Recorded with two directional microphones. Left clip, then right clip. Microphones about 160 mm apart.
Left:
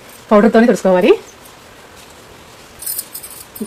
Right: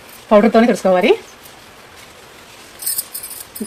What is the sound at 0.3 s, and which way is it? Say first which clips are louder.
Speech: left 1 dB; 30° left (ahead or behind).